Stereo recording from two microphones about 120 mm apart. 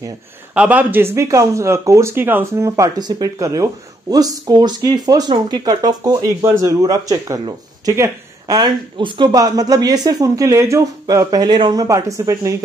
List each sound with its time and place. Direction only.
0.6 s speech: 15° right (ahead or behind)
8.9 s speech: 45° right (ahead or behind)
9.3 s speech: 30° right (ahead or behind)
11.2 s speech: 35° right (ahead or behind)